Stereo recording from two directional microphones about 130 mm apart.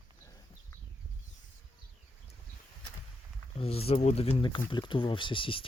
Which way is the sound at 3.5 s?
50° left (ahead or behind).